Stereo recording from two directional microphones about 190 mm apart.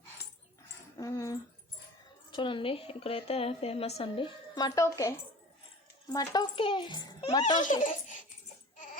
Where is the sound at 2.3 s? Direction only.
25° left (ahead or behind).